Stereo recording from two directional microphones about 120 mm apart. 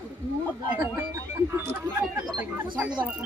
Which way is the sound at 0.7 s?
15° right (ahead or behind).